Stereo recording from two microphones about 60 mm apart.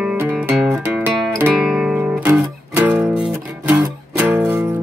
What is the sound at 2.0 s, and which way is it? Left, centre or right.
Music, right.